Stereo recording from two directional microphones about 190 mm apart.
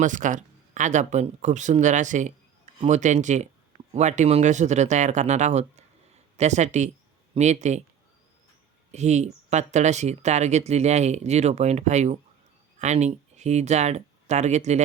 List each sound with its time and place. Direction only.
0.0 s speech: 40° right (ahead or behind)
8.9 s speech: 35° right (ahead or behind)